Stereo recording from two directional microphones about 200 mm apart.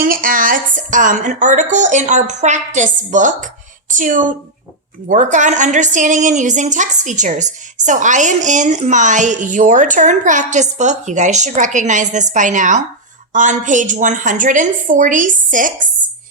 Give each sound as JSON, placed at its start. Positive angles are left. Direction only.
{"t": 0.0, "sound": "a woman's voice", "side_deg": -45}